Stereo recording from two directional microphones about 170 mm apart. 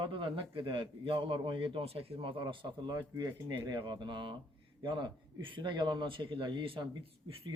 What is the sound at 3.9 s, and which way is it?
A man's voice, 25° right (ahead or behind).